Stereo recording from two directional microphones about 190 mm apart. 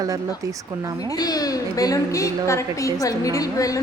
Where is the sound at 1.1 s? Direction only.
20° left (ahead or behind).